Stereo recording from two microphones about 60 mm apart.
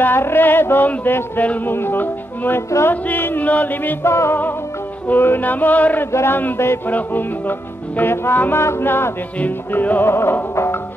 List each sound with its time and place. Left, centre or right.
0.0 s music: left
4.0 s music: left
5.1 s music: left
6.1 s music: left
6.9 s music: left
9.4 s music: left